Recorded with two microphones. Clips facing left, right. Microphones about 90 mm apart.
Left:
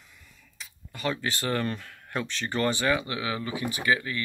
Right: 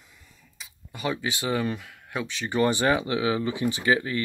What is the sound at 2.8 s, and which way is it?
Speech, 30° right (ahead or behind).